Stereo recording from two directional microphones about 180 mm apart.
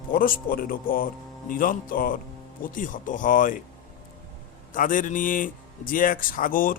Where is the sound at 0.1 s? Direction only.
50° left (ahead or behind).